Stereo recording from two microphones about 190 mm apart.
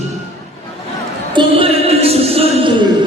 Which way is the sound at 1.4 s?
30° right (ahead or behind).